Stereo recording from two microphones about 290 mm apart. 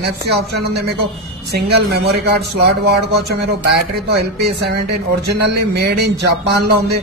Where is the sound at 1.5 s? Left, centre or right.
Right.